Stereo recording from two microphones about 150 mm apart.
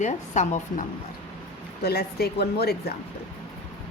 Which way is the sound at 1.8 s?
90° left.